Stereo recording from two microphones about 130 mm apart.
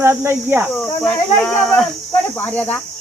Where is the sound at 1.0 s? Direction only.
5° left (ahead or behind).